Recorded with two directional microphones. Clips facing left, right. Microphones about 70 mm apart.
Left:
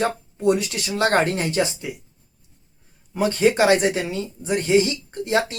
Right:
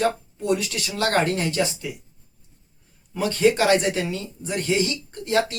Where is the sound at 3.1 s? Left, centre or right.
Left.